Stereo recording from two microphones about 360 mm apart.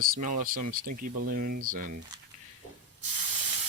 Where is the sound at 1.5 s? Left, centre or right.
Right.